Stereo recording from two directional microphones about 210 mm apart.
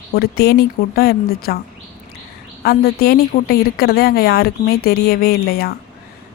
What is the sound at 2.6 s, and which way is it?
A woman's voice, 45° left (ahead or behind).